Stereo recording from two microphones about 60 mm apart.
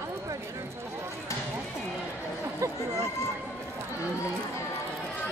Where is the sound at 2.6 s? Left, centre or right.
Right.